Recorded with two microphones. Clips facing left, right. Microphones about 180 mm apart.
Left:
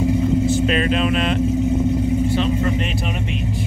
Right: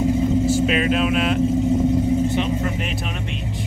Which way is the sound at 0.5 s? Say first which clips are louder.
Even; 5° right (ahead or behind).